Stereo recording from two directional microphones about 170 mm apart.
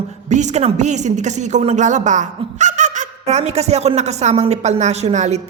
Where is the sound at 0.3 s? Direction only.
45° right (ahead or behind).